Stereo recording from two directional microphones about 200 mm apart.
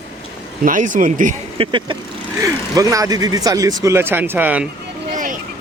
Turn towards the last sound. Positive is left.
turn(degrees=-40)  # may be behind; listen again after turning